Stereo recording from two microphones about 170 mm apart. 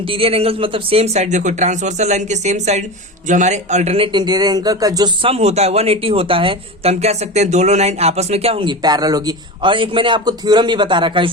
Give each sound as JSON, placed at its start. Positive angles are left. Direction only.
{"t": 0.0, "sound": "a man's voice", "side_deg": -35}